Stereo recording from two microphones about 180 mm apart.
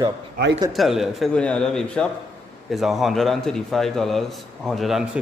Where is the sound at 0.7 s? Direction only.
Centre (ahead or behind).